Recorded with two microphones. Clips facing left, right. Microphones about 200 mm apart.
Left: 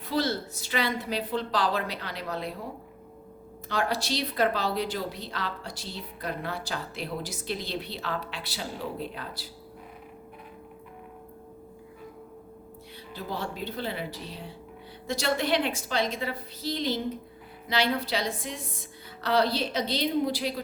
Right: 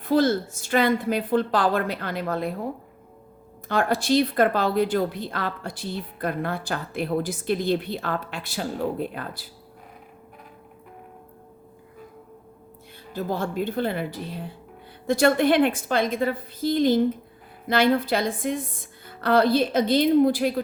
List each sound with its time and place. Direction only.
0.0 s speech: 50° right (ahead or behind)
3.7 s speech: 50° right (ahead or behind)
13.1 s speech: 50° right (ahead or behind)